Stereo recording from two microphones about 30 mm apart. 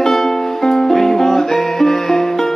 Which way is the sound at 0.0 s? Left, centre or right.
Centre.